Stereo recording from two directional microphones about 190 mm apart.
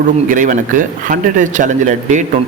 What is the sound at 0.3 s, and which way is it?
A man's voice, 45° right (ahead or behind).